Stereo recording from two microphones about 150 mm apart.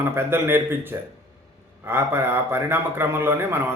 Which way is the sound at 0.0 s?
15° right (ahead or behind).